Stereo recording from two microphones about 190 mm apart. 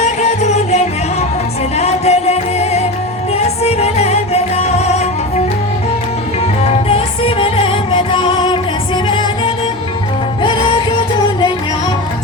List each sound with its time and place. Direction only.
0.0 s music: 35° left (ahead or behind)
6.6 s music: 30° left (ahead or behind)